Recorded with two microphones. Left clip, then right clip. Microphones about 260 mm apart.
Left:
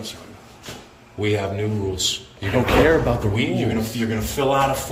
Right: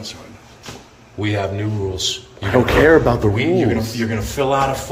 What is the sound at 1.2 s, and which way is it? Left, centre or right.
A man's voice, centre.